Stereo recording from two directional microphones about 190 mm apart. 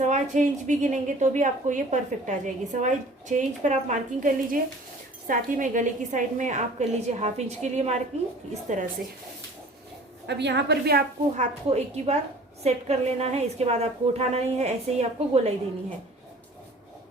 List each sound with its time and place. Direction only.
0.0 s a woman's voice: 40° right (ahead or behind)
10.2 s a woman's voice: 65° right (ahead or behind)
11.3 s a woman's voice: 35° right (ahead or behind)